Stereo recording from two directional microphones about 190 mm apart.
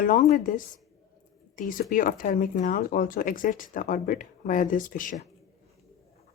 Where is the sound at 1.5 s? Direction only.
45° left (ahead or behind).